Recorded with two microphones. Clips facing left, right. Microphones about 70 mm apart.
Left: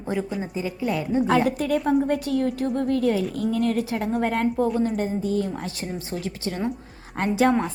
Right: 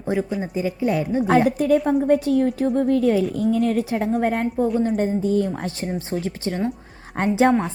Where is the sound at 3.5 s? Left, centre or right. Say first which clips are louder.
Right 2 dB; left.